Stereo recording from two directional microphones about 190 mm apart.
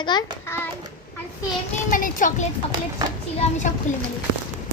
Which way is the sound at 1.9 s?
45° left (ahead or behind).